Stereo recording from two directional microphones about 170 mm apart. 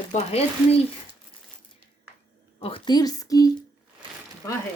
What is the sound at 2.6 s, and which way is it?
Speech, 30° left (ahead or behind).